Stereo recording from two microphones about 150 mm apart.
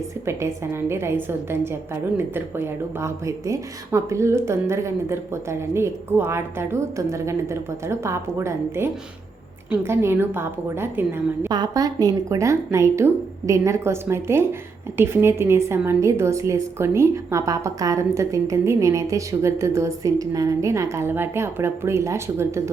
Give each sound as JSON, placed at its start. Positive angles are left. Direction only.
{"t": 0.3, "sound": "speech", "side_deg": -15}
{"t": 11.4, "sound": "a woman's voice", "side_deg": -25}